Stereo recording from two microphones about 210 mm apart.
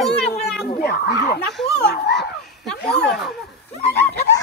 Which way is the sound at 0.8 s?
50° left (ahead or behind).